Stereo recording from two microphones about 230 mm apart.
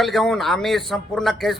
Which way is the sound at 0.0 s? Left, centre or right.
Centre.